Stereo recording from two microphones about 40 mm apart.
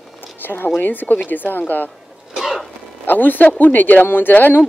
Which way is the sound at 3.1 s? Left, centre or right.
Left.